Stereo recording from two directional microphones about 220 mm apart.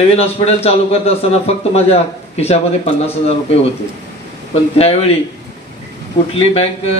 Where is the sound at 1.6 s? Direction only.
30° left (ahead or behind).